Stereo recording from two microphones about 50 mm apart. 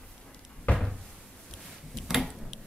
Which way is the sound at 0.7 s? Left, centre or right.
Left.